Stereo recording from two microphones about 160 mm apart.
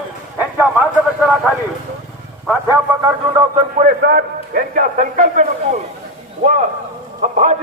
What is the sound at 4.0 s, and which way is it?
A man's voice, 80° right.